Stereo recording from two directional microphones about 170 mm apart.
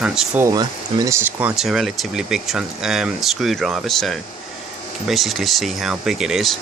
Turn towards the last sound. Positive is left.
turn(degrees=0)  # may be behind; listen again after turning